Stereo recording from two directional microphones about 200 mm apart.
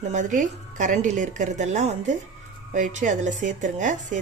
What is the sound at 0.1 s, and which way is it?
Speech, 40° right (ahead or behind).